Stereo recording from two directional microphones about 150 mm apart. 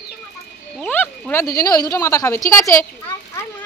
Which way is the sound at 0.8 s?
10° left (ahead or behind).